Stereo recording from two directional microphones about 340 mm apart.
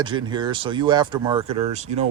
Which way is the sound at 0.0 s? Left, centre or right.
Centre.